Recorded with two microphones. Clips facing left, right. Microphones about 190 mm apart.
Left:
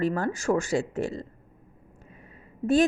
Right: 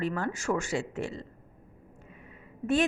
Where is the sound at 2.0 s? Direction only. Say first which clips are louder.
Left 1 dB; 35° left (ahead or behind).